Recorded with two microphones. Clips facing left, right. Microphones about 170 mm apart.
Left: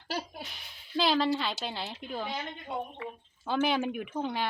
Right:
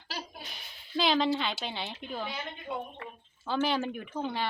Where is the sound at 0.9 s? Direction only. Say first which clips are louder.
Even; centre (ahead or behind).